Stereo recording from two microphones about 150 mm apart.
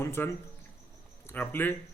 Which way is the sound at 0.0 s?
15° left (ahead or behind).